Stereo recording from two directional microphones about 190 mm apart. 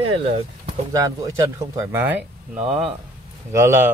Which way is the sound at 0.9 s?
15° right (ahead or behind).